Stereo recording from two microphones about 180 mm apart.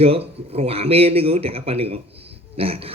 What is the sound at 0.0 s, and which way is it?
A man's voice, 35° right (ahead or behind).